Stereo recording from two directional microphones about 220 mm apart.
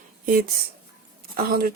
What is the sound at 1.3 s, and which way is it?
Speech, 45° right (ahead or behind).